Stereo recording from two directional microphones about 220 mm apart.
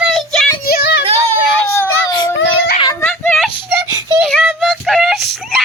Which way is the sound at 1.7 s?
15° left (ahead or behind).